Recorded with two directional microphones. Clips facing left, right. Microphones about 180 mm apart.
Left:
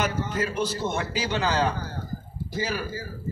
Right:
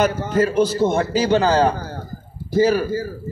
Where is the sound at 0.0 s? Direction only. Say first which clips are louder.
Right 9 dB; 40° right (ahead or behind).